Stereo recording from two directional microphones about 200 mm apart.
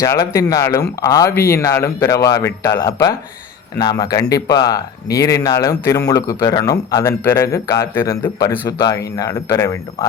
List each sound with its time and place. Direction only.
0.0 s speech: 15° left (ahead or behind)